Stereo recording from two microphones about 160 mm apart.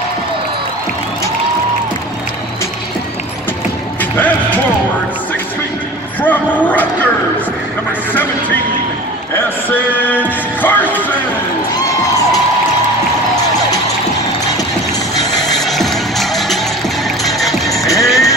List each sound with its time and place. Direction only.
4.0 s music: 10° left (ahead or behind)
6.2 s dog: 10° left (ahead or behind)
9.7 s music: 10° left (ahead or behind)
15.5 s music: centre (ahead or behind)
17.6 s music: 20° left (ahead or behind)